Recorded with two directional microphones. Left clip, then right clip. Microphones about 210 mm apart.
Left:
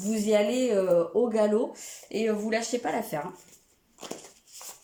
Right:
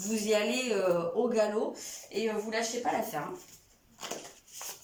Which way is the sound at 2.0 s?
45° left (ahead or behind).